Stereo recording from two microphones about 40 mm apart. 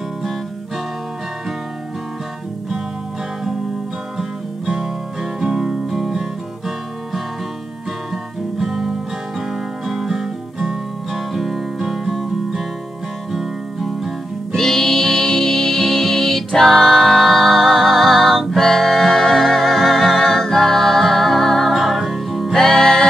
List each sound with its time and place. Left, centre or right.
4.2 s music: centre
8.1 s guitar: centre
9.5 s music: centre
13.3 s music: centre
14.5 s music: centre
22.6 s music: centre